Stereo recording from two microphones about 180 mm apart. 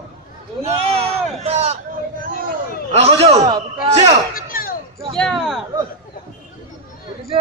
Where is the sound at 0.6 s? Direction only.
35° right (ahead or behind).